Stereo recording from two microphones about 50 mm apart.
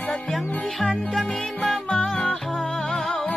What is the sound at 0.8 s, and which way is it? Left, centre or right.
Music, left.